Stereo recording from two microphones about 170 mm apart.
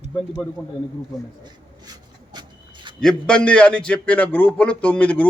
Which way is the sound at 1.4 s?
25° right (ahead or behind).